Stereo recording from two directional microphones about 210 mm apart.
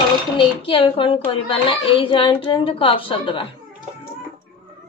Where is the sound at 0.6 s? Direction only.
25° left (ahead or behind).